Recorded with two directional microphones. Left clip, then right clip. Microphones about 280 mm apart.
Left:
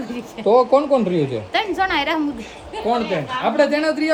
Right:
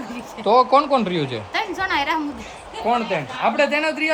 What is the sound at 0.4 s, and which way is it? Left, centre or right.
Speech, centre.